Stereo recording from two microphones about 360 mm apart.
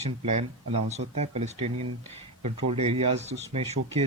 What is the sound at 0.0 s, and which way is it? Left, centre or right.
Speech, centre.